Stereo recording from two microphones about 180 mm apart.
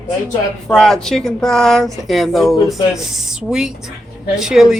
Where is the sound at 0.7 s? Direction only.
5° left (ahead or behind).